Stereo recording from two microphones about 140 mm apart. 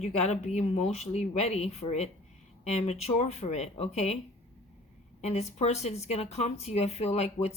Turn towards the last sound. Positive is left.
turn(degrees=50)  # may be behind; listen again after turning